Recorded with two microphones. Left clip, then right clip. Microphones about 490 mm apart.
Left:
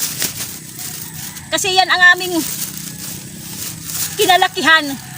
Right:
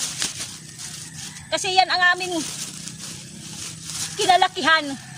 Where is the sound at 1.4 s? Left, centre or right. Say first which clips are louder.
Left 5 dB; right.